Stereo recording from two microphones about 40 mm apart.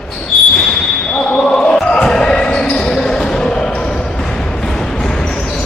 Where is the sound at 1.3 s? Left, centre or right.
Centre.